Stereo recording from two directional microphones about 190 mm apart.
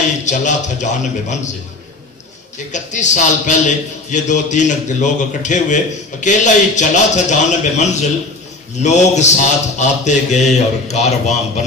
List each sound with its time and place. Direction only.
0.2 s speech: 40° left (ahead or behind)
2.7 s speech: 40° left (ahead or behind)